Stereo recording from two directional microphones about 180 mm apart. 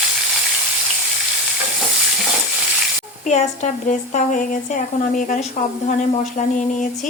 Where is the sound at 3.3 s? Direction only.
45° left (ahead or behind).